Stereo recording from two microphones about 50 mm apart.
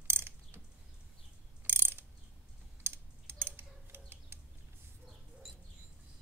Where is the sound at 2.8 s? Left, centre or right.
Right.